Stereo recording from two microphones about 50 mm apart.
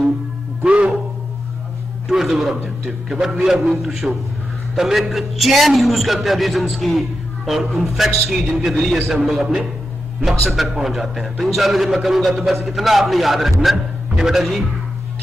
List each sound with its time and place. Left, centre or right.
0.7 s music: right
2.0 s a man's voice: centre